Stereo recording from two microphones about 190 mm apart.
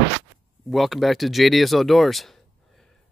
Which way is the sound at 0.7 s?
Centre (ahead or behind).